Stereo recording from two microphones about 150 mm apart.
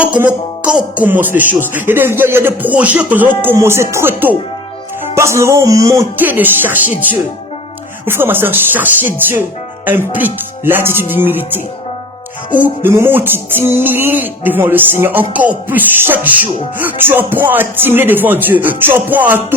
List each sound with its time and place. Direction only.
0.0 s music: 10° right (ahead or behind)
0.9 s speech: 10° right (ahead or behind)